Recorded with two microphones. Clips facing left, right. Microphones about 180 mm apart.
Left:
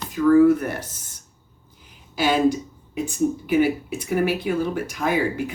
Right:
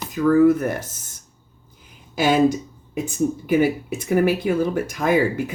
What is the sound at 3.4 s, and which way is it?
Speech, 45° right (ahead or behind).